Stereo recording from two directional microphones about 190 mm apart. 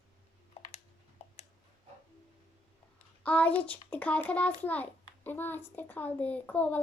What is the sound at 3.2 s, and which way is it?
A child's voice, 10° left (ahead or behind).